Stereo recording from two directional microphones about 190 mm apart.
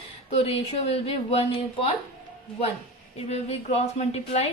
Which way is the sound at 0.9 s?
30° left (ahead or behind).